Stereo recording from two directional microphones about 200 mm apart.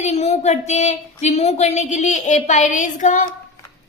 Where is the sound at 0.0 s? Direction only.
35° left (ahead or behind).